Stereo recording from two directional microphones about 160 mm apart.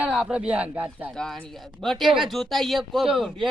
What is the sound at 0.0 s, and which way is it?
Speech, 5° right (ahead or behind).